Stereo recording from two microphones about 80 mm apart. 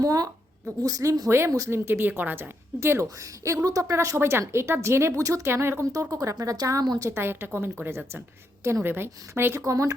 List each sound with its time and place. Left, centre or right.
0.0 s a woman's voice: right
5.8 s speech: right
7.1 s a woman's voice: right
9.6 s a woman's voice: right